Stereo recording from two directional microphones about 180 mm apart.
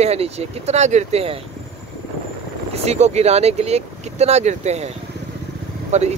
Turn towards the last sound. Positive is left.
turn(degrees=-40)  # may be behind; listen again after turning